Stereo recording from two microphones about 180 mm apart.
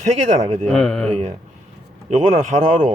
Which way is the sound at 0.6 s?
5° left (ahead or behind).